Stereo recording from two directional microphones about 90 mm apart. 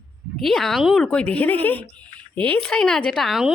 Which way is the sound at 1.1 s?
15° left (ahead or behind).